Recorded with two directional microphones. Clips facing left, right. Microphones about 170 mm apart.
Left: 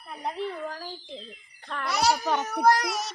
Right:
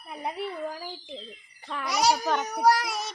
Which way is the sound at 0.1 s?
10° right (ahead or behind).